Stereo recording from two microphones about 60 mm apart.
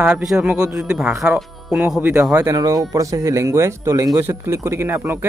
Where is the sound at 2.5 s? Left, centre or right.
Right.